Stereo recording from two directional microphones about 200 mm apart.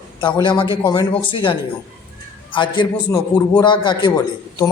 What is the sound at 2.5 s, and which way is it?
A man's voice, 25° left (ahead or behind).